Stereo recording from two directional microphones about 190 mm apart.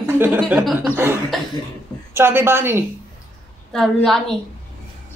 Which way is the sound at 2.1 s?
10° right (ahead or behind).